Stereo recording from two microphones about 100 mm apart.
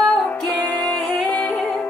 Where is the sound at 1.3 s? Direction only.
30° left (ahead or behind).